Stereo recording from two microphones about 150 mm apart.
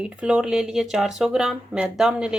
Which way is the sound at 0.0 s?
5° right (ahead or behind).